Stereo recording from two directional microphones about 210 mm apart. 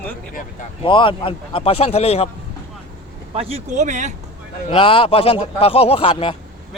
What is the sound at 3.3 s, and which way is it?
Speech, 30° right (ahead or behind).